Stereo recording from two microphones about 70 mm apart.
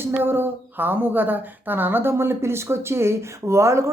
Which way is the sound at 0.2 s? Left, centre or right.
Right.